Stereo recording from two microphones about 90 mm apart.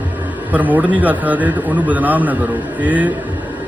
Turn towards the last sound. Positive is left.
turn(degrees=-20)  # may be behind; listen again after turning